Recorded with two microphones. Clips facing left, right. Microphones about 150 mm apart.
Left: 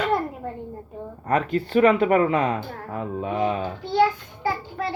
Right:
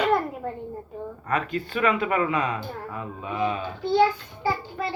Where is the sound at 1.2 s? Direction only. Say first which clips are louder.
Left 5 dB; 40° left (ahead or behind).